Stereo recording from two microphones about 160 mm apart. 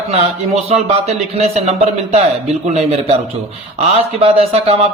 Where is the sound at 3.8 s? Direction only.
40° right (ahead or behind).